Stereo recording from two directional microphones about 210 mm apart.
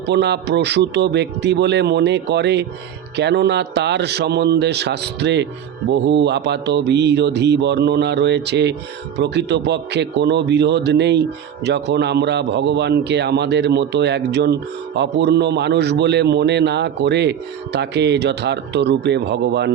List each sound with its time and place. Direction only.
0.1 s a man's voice: 55° right (ahead or behind)